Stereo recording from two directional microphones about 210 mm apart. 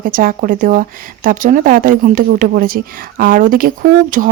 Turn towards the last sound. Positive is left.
turn(degrees=-40)  # may be behind; listen again after turning